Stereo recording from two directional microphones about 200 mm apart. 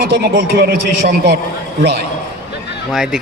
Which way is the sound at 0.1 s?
55° right (ahead or behind).